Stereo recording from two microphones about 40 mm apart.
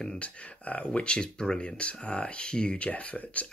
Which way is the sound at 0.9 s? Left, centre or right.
Left.